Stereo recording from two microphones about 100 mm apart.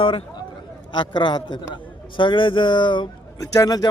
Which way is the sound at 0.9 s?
50° left (ahead or behind).